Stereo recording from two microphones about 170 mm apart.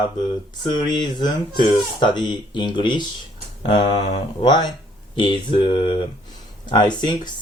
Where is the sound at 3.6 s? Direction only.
30° left (ahead or behind).